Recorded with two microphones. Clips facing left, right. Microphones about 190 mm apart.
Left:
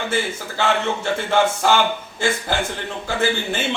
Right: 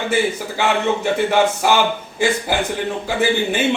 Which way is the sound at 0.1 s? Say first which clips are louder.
Right 5 dB; 15° right (ahead or behind).